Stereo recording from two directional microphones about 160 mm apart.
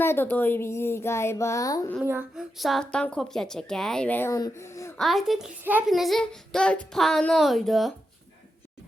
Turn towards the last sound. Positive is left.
turn(degrees=0)  # may be behind; listen again after turning